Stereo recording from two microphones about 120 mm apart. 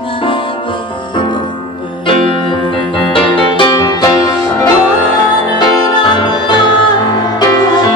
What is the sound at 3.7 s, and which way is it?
Music, 30° left (ahead or behind).